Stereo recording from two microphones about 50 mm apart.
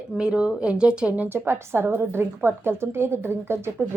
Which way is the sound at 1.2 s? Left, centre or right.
Right.